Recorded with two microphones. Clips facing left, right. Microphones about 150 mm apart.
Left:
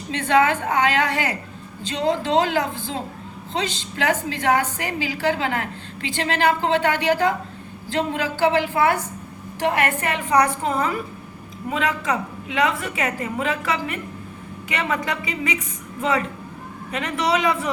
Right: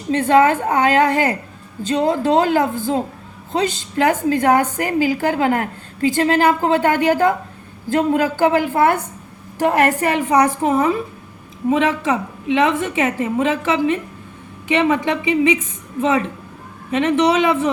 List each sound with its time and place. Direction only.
0.1 s a woman's voice: 45° right (ahead or behind); by 17.7 s 30° right (ahead or behind)